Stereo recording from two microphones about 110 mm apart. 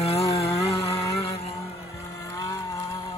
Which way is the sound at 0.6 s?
30° left (ahead or behind).